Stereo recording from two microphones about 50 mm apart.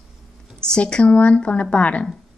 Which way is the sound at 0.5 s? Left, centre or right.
Centre.